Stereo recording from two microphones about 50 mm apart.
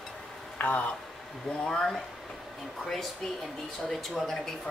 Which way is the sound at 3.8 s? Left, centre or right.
Centre.